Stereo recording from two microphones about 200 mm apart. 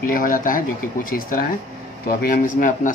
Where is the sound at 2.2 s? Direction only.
45° left (ahead or behind).